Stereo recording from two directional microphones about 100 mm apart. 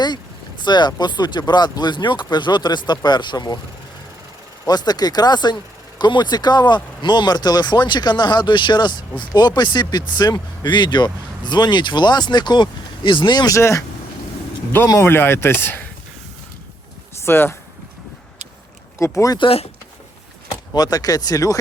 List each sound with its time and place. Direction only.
0.6 s speech: 50° left (ahead or behind)
4.6 s speech: 45° left (ahead or behind)
13.6 s speech: 30° left (ahead or behind)
14.9 s speech: 20° left (ahead or behind)
17.2 s speech: 25° left (ahead or behind)
18.9 s speech: 30° left (ahead or behind)
19.4 s speech: 75° left (ahead or behind)
20.7 s speech: 40° left (ahead or behind)